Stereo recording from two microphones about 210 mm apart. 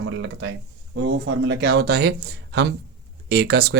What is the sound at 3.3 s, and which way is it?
Speech, 50° right (ahead or behind).